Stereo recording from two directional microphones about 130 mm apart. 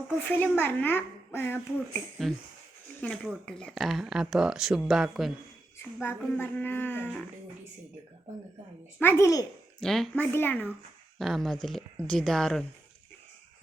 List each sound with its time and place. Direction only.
0.3 s speech: 15° left (ahead or behind)
2.3 s speech: 5° left (ahead or behind)
6.0 s speech: 15° left (ahead or behind)
9.0 s speech: 15° left (ahead or behind)
9.2 s a child's voice: 25° left (ahead or behind)
9.8 s speech: 5° left (ahead or behind)
10.2 s speech: 15° left (ahead or behind)
11.2 s speech: centre (ahead or behind)